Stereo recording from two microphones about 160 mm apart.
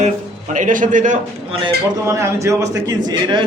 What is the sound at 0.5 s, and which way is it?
Speech, 55° right (ahead or behind).